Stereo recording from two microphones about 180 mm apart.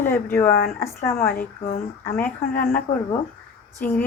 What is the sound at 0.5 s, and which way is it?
Speech, 55° left (ahead or behind).